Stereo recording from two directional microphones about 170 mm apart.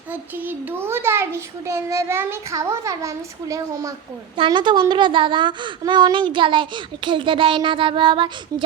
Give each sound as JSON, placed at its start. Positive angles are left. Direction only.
{"t": 0.1, "sound": "a child's voice", "side_deg": -10}